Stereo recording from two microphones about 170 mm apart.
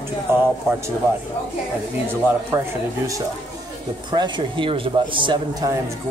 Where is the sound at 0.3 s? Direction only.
15° right (ahead or behind).